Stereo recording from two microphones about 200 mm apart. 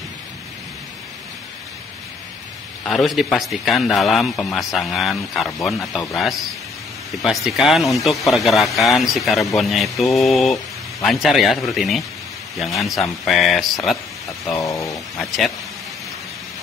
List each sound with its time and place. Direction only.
2.8 s speech: centre (ahead or behind)
14.5 s speech: 15° left (ahead or behind)
14.9 s speech: centre (ahead or behind)